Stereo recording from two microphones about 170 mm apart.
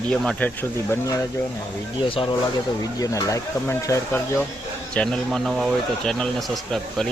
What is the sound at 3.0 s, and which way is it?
Speech, 20° left (ahead or behind).